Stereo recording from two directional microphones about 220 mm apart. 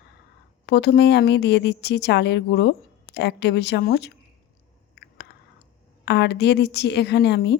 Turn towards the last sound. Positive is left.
turn(degrees=50)  # may be behind; listen again after turning